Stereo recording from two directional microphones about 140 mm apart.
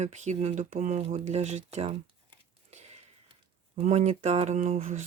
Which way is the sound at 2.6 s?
50° right (ahead or behind).